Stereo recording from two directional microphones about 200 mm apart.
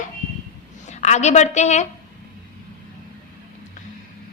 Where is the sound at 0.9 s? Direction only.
35° left (ahead or behind).